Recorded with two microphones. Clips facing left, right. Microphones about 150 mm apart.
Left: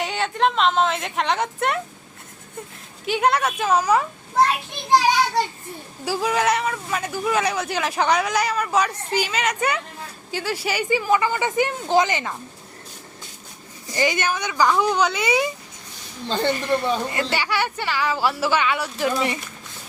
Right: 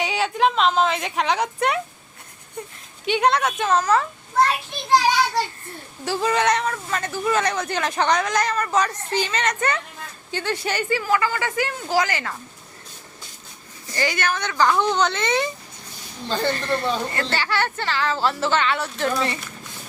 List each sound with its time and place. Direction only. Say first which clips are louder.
0.0 s a woman's voice: right 1 dB; centre (ahead or behind)
6.1 s speech: right 1 dB; 5° left (ahead or behind)
13.9 s speech: left 2 dB; 15° left (ahead or behind)